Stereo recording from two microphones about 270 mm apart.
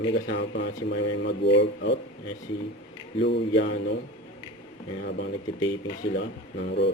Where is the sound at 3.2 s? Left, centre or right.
Left.